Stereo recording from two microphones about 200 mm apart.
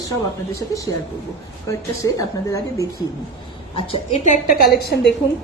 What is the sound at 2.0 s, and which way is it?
Speech, 15° left (ahead or behind).